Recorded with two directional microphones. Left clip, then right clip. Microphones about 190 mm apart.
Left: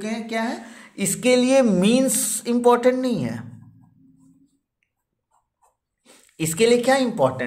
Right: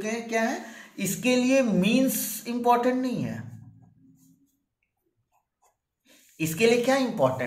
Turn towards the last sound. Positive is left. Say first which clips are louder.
# left 4 dB
turn(degrees=40)  # may be behind; listen again after turning